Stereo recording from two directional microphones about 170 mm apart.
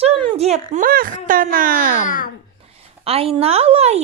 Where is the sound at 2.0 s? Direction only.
50° left (ahead or behind).